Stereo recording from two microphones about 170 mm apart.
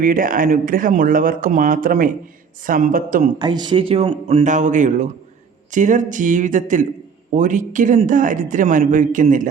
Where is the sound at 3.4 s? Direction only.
25° right (ahead or behind).